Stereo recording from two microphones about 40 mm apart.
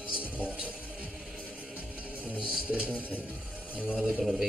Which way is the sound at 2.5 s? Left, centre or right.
Right.